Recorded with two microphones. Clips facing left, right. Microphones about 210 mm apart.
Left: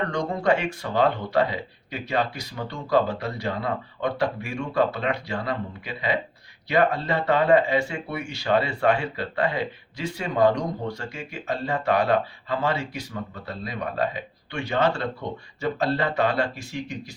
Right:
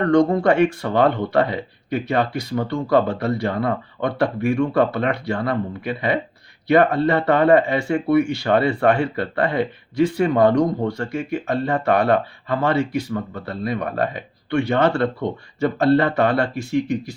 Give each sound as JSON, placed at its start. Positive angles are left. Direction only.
{"t": 0.1, "sound": "speech", "side_deg": -60}